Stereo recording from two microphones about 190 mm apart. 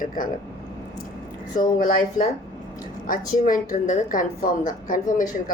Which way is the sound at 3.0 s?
45° left (ahead or behind).